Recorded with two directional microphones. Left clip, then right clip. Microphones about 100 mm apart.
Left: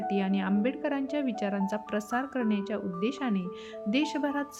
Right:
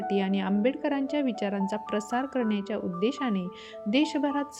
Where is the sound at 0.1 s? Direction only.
30° right (ahead or behind).